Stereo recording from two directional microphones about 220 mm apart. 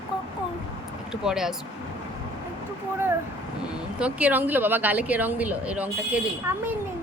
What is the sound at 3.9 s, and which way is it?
A woman's voice, 5° right (ahead or behind).